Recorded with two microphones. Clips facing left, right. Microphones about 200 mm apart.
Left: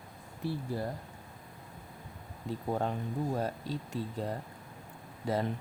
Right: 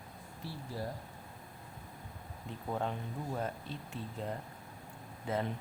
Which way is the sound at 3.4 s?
40° left (ahead or behind).